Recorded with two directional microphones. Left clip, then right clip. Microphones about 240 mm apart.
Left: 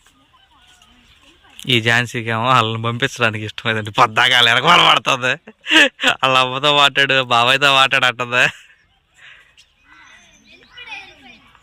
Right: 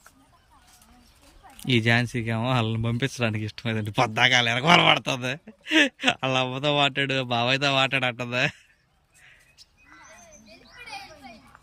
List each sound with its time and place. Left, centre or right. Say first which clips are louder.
1.5 s speech: left 8 dB; centre